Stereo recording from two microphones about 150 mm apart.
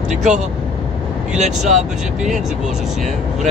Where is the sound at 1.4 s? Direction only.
50° right (ahead or behind).